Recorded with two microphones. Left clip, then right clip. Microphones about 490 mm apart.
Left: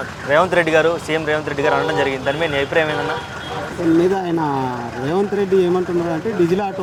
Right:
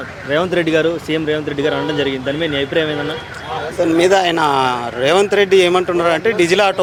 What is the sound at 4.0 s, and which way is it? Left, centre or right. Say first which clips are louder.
Speech: right 6 dB; right.